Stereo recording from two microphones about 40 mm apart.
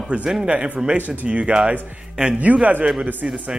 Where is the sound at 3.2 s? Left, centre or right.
Centre.